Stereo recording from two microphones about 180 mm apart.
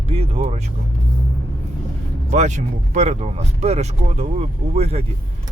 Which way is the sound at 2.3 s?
40° right (ahead or behind).